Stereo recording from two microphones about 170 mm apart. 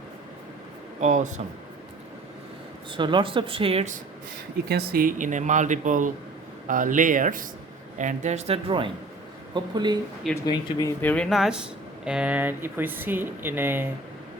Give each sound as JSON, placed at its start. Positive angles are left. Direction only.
{"t": 1.0, "sound": "speech", "side_deg": -45}
{"t": 2.9, "sound": "speech", "side_deg": -30}
{"t": 4.7, "sound": "speech", "side_deg": -65}
{"t": 10.4, "sound": "speech", "side_deg": 25}
{"t": 11.1, "sound": "speech", "side_deg": 0}